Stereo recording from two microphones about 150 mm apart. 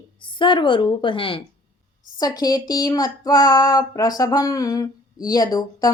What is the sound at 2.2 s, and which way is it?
Speech, 25° left (ahead or behind).